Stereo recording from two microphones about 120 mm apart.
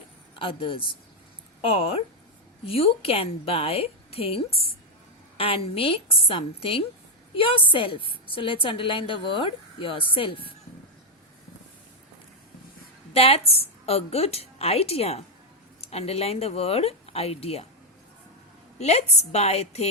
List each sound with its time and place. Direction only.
0.3 s a woman's voice: 45° left (ahead or behind)
13.1 s a woman's voice: 55° left (ahead or behind)
18.8 s a woman's voice: 65° left (ahead or behind)